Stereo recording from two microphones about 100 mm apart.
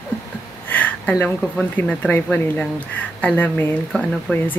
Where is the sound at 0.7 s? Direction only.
15° left (ahead or behind).